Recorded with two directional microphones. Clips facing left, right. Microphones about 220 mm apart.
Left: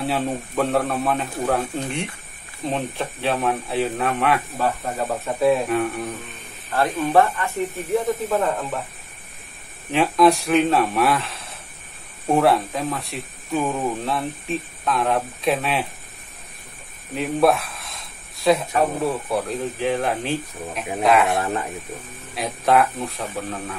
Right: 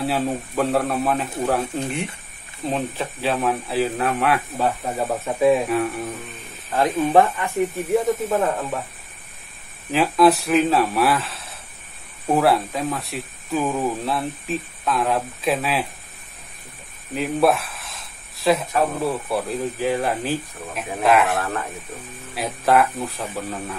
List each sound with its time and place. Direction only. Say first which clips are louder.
0.0 s speech: right 1 dB; centre (ahead or behind)
4.6 s speech: right 1 dB; 10° right (ahead or behind)
5.7 s speech: even; centre (ahead or behind)
7.1 s speech: left 1 dB; 15° right (ahead or behind)
9.8 s speech: even; centre (ahead or behind)
17.1 s speech: even; centre (ahead or behind)
21.4 s speech: left 2 dB; 20° left (ahead or behind)
22.3 s speech: even; centre (ahead or behind)